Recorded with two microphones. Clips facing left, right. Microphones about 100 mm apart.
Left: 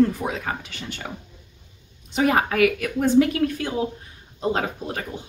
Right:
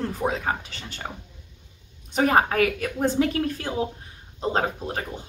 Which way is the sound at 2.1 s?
35° right (ahead or behind).